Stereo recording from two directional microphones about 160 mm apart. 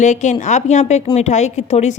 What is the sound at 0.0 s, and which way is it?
A woman's voice, 50° left (ahead or behind).